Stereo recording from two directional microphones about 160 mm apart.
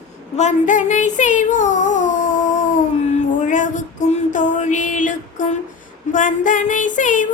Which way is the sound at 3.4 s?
50° left (ahead or behind).